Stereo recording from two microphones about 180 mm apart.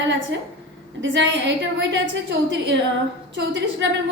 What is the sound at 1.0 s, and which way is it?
A woman's voice, 85° right.